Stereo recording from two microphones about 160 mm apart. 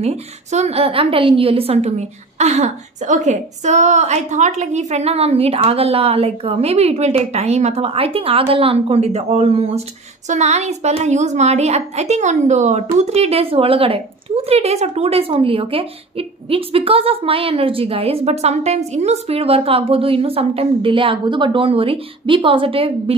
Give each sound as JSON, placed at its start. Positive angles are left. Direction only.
{"t": 0.0, "sound": "a woman's voice", "side_deg": -45}